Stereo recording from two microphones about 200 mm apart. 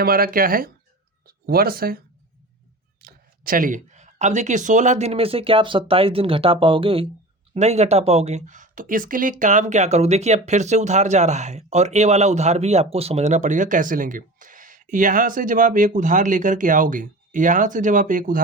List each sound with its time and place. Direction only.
0.0 s speech: 45° right (ahead or behind)
3.0 s speech: 45° right (ahead or behind)